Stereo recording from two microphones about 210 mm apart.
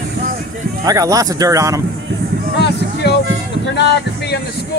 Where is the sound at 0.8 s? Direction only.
15° right (ahead or behind).